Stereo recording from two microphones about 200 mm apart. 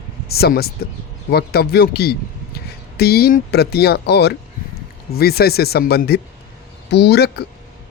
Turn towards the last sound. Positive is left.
turn(degrees=55)  # may be behind; listen again after turning